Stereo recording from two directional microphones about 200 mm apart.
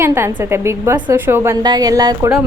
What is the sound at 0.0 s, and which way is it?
A woman's voice, 15° right (ahead or behind).